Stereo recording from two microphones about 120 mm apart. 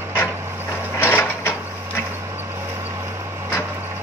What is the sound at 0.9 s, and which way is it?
Mechanisms, 20° left (ahead or behind).